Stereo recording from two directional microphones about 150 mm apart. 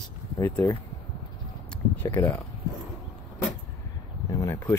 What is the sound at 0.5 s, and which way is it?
Speech, 25° left (ahead or behind).